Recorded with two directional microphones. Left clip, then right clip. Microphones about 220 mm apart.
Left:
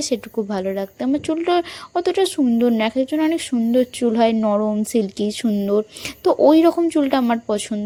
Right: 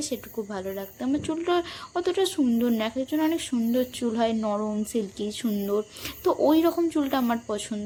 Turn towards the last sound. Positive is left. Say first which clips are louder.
# left 8 dB
turn(degrees=30)  # may be behind; listen again after turning